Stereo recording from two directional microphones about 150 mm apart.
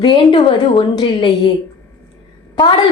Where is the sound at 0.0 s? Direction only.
30° left (ahead or behind).